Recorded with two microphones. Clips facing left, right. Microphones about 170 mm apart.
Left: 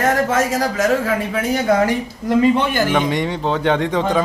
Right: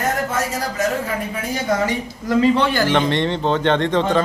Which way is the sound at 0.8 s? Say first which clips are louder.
Left 3 dB; 90° left.